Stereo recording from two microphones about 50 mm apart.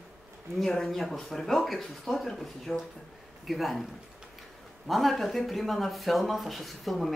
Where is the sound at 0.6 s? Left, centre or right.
Centre.